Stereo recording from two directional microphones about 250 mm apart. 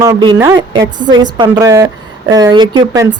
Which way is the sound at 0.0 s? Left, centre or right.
Centre.